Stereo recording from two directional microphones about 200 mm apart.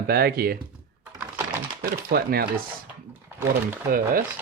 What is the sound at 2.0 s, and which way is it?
Speech, 50° right (ahead or behind).